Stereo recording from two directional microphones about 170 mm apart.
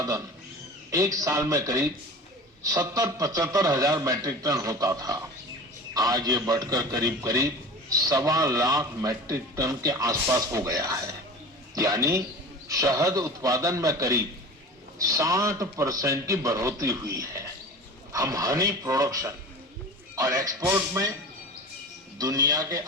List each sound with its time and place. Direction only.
0.9 s a man's voice: 20° right (ahead or behind)
22.2 s a man's voice: 20° right (ahead or behind)